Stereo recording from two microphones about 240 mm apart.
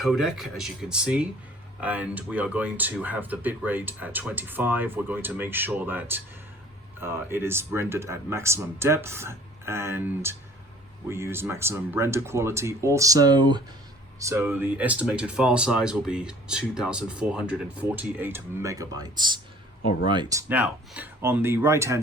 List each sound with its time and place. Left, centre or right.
0.0 s speech: centre
20.5 s speech: centre